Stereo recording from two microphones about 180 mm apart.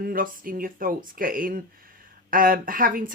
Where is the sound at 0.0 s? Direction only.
50° right (ahead or behind).